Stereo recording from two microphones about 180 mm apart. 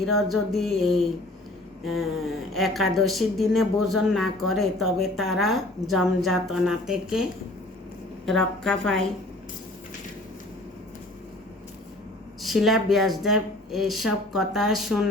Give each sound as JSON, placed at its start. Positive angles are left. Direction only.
{"t": 0.0, "sound": "a woman's voice", "side_deg": 0}
{"t": 8.3, "sound": "a woman's voice", "side_deg": 5}
{"t": 12.4, "sound": "a woman's voice", "side_deg": 0}